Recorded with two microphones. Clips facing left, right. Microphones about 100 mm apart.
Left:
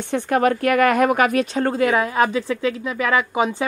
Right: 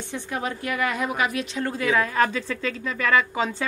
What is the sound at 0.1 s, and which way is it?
Speech, 60° left (ahead or behind).